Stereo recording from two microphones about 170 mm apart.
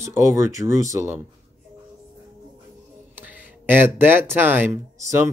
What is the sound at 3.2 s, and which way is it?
Speech, 10° right (ahead or behind).